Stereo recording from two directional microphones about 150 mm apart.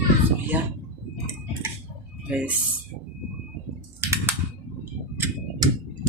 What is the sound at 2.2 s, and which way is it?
Speech, 10° right (ahead or behind).